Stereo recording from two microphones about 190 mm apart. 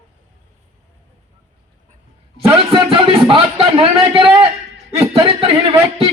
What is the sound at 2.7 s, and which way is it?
Music, 30° right (ahead or behind).